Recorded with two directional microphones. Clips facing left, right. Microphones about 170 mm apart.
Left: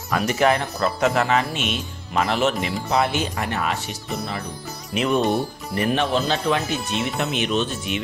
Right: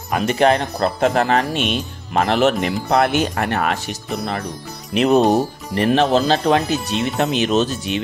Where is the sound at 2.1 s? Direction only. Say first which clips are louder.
Right 5 dB; 55° right (ahead or behind).